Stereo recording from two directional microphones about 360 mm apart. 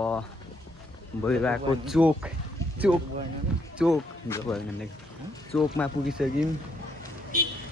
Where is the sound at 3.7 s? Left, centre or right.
Centre.